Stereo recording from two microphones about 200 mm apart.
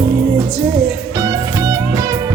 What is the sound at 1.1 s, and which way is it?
Music, 15° right (ahead or behind).